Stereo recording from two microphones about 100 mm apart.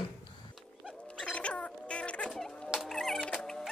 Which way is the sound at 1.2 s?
10° left (ahead or behind).